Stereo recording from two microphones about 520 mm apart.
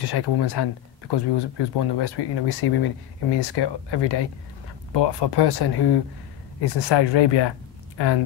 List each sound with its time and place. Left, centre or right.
0.0 s speech: left